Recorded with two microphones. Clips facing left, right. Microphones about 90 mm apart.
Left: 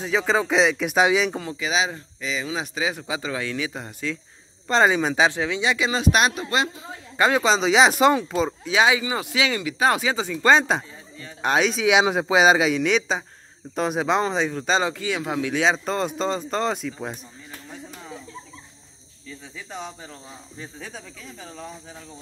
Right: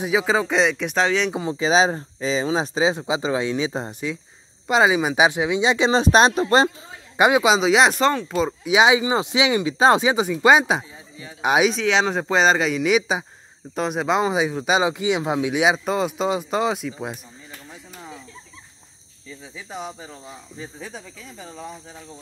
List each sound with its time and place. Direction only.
0.0 s speech: 5° right (ahead or behind)
1.3 s speech: 25° right (ahead or behind)
4.6 s speech: 10° right (ahead or behind); by 6.7 s 35° right (ahead or behind)
7.2 s speech: 15° right (ahead or behind)
8.6 s speech: 20° right (ahead or behind)
11.7 s speech: 10° left (ahead or behind)
19.2 s speech: 5° right (ahead or behind)